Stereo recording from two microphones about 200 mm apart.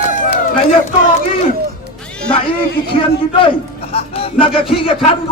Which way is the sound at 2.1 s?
5° left (ahead or behind).